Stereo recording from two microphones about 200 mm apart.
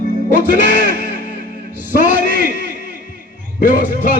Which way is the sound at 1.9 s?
45° left (ahead or behind).